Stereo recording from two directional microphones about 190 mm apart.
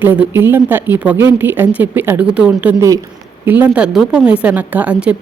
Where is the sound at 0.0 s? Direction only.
10° right (ahead or behind).